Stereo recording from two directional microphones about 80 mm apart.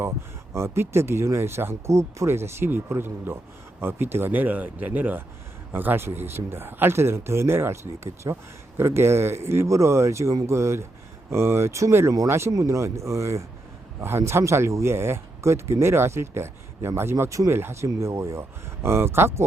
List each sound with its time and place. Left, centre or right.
0.5 s speech: right